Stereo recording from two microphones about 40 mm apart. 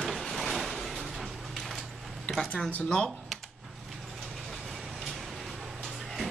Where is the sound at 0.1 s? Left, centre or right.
Centre.